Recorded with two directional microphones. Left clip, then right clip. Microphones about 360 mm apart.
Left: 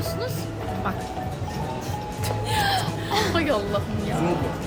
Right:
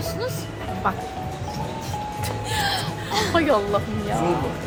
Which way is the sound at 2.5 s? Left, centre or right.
Centre.